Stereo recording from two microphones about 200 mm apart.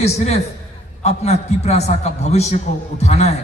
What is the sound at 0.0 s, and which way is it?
A man's voice, 30° left (ahead or behind).